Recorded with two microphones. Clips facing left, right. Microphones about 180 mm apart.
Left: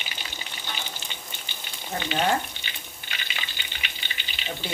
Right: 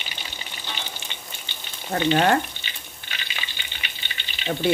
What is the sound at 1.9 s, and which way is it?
Speech, 60° right (ahead or behind).